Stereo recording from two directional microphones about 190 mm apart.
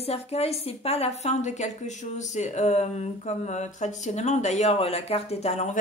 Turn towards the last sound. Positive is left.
turn(degrees=35)  # may be behind; listen again after turning